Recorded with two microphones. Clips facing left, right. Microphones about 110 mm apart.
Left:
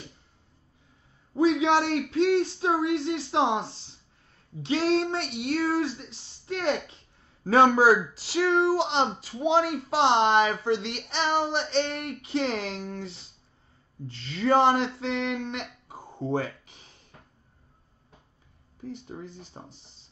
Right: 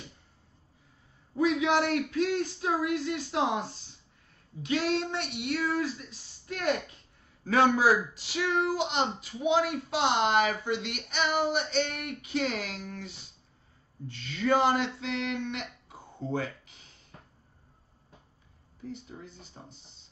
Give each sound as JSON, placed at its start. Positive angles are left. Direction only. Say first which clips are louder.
{"t": 1.3, "sound": "speech", "louder": "left 4 dB", "side_deg": 30}
{"t": 19.1, "sound": "speech", "louder": "left 6 dB", "side_deg": 45}